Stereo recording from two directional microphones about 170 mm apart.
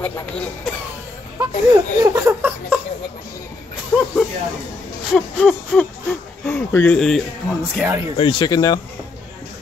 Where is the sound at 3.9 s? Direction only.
10° left (ahead or behind).